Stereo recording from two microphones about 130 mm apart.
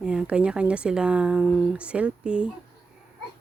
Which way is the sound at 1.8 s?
10° right (ahead or behind).